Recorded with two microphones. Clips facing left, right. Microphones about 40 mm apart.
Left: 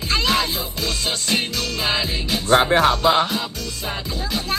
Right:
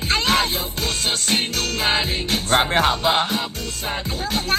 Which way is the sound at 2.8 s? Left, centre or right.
Centre.